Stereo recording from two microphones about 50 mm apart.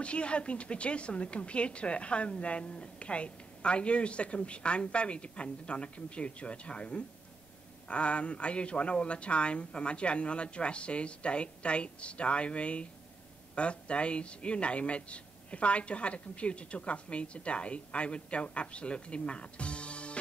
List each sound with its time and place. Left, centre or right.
0.0 s a woman's voice: left